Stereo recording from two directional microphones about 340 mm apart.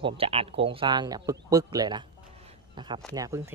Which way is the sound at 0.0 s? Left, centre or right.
Centre.